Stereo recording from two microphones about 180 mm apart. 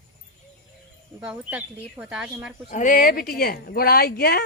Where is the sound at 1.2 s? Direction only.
5° right (ahead or behind).